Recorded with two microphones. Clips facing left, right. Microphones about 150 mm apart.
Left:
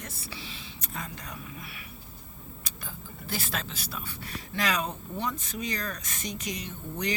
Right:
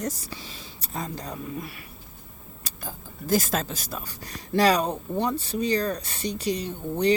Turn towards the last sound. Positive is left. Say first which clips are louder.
# right 10 dB
turn(degrees=-30)  # may be behind; listen again after turning